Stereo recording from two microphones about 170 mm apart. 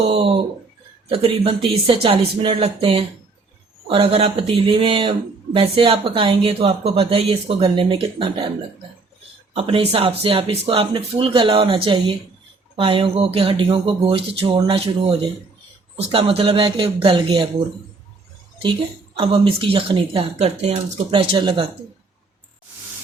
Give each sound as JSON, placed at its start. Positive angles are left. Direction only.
{"t": 0.1, "sound": "speech", "side_deg": -35}
{"t": 9.6, "sound": "speech", "side_deg": -35}
{"t": 18.6, "sound": "speech", "side_deg": -30}